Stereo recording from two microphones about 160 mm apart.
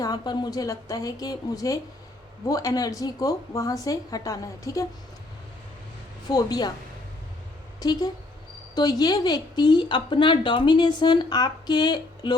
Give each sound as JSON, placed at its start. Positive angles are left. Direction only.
{"t": 0.0, "sound": "a woman's voice", "side_deg": 25}
{"t": 6.3, "sound": "a woman's voice", "side_deg": 25}
{"t": 7.8, "sound": "a woman's voice", "side_deg": 25}